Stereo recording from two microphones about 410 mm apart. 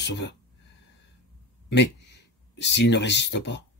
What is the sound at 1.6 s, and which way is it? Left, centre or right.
Speech, left.